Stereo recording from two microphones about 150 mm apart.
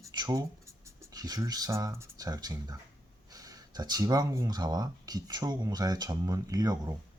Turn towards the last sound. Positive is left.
turn(degrees=-25)  # may be behind; listen again after turning